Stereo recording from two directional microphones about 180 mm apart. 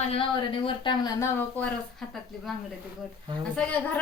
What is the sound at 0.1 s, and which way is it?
Speech, 30° left (ahead or behind).